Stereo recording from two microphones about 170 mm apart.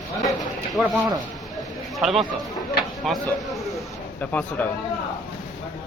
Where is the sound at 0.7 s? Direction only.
Centre (ahead or behind).